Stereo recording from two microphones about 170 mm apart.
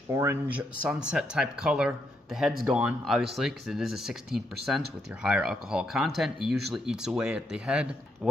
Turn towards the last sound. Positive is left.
turn(degrees=-5)  # may be behind; listen again after turning